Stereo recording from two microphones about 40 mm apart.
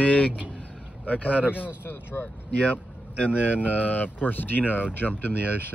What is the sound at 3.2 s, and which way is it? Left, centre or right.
Speech, right.